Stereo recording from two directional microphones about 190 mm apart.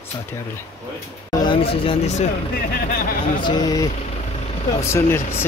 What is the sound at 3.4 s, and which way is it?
Speech, 20° left (ahead or behind).